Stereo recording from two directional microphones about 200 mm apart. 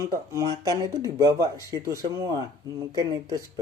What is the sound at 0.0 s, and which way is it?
Speech, 15° right (ahead or behind).